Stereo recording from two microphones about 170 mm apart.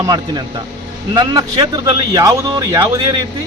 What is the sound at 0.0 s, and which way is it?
Speech, 25° right (ahead or behind).